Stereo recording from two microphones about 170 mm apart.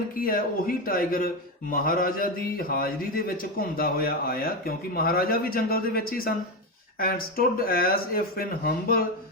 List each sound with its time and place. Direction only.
0.2 s a man's voice: 55° left (ahead or behind)